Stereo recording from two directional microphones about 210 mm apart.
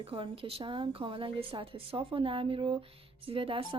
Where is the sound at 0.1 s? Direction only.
25° right (ahead or behind).